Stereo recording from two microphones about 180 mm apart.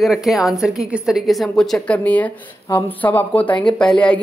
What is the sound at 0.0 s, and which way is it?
A woman's voice, centre (ahead or behind).